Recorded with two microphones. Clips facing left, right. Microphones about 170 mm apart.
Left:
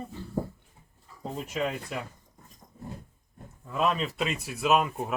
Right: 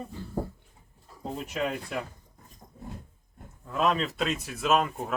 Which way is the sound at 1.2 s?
Centre (ahead or behind).